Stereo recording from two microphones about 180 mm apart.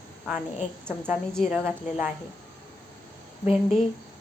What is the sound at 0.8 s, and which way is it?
Speech, 10° right (ahead or behind).